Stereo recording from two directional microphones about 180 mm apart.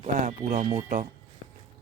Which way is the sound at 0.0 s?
40° right (ahead or behind).